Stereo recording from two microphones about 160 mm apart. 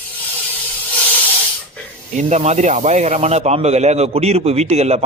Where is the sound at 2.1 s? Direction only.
45° right (ahead or behind).